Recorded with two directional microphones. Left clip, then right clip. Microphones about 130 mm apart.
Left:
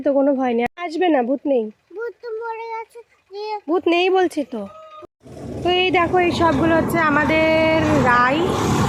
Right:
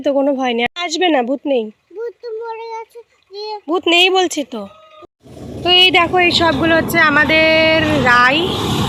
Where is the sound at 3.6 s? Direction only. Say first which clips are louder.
Right 6 dB; 10° left (ahead or behind).